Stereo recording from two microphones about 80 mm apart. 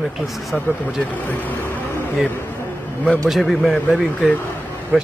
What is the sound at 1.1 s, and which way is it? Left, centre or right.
Speech, left.